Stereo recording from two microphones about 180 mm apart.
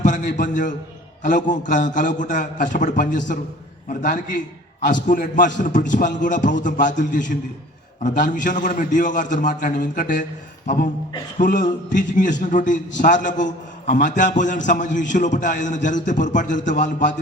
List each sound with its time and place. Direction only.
0.0 s a man's voice: 45° left (ahead or behind)
11.3 s a man's voice: 45° left (ahead or behind)